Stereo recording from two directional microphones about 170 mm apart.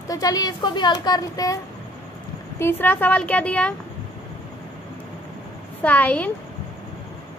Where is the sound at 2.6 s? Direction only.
10° left (ahead or behind).